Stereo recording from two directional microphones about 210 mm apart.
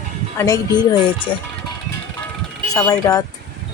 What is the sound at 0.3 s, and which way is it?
Speech, 15° left (ahead or behind).